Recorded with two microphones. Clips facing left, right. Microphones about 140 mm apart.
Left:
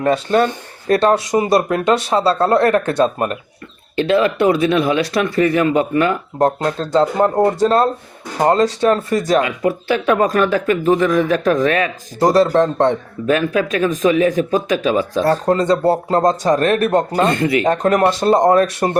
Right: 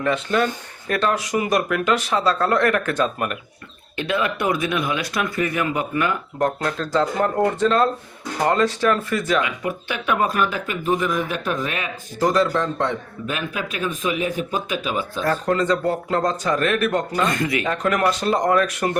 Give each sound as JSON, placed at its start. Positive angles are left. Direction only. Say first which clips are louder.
{"t": 0.0, "sound": "speech", "louder": "left 6 dB", "side_deg": 35}